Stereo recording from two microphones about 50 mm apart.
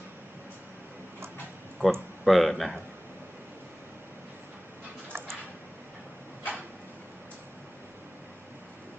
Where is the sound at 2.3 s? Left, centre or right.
Centre.